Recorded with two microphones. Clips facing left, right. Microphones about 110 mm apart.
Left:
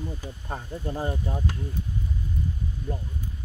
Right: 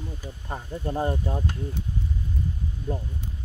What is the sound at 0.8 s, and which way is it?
Speech, 20° right (ahead or behind).